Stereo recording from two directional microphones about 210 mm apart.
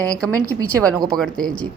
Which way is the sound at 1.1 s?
5° left (ahead or behind).